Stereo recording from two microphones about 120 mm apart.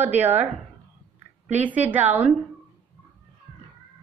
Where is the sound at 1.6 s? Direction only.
15° right (ahead or behind).